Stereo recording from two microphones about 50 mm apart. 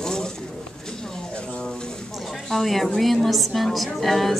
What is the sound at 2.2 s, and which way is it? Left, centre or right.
A woman's voice, centre.